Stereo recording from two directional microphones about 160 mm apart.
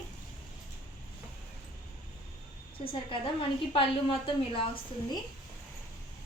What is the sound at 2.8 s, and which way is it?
A woman's voice, 35° left (ahead or behind).